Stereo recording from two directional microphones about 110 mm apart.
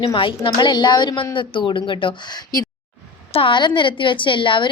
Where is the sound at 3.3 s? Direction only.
50° left (ahead or behind).